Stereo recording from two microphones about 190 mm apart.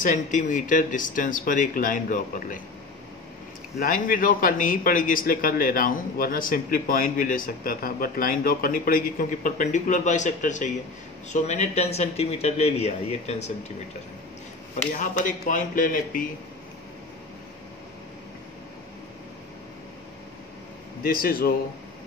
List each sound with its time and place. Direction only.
0.0 s a man's voice: 45° left (ahead or behind)
3.8 s a man's voice: 45° left (ahead or behind)
15.0 s a man's voice: 40° left (ahead or behind)
21.0 s a man's voice: 50° left (ahead or behind)